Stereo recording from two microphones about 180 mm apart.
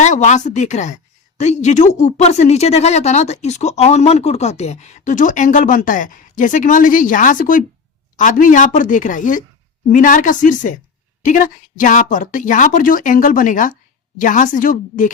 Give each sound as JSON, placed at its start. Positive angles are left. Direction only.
{"t": 0.0, "sound": "a woman's voice", "side_deg": 40}